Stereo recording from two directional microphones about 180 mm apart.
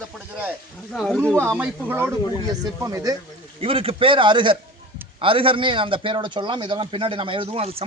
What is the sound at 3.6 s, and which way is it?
A man's voice, 30° right (ahead or behind).